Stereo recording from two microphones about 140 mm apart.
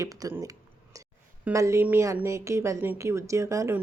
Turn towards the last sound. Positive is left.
turn(degrees=-20)  # may be behind; listen again after turning